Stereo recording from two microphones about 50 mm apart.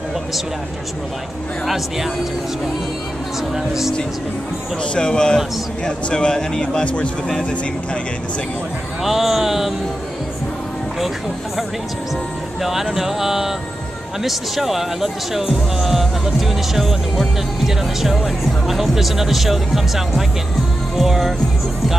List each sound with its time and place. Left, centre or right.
3.5 s speech: centre
4.9 s a man's voice: centre
9.0 s speech: centre
12.9 s speech: centre